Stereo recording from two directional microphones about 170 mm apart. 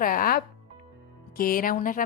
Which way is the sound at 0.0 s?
55° left (ahead or behind).